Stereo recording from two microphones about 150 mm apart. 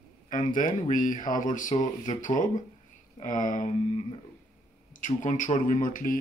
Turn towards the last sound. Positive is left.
turn(degrees=60)  # may be behind; listen again after turning